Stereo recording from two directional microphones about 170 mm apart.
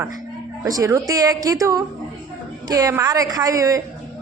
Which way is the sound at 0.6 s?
20° right (ahead or behind).